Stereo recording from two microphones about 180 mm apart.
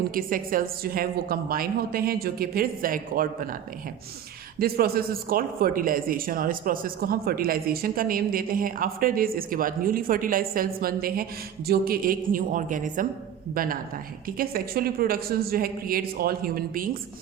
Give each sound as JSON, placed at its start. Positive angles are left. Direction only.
{"t": 0.1, "sound": "a woman's voice", "side_deg": -50}
{"t": 4.6, "sound": "a woman's voice", "side_deg": -55}